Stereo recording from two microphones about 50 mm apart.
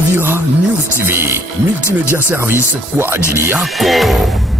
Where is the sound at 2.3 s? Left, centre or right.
Right.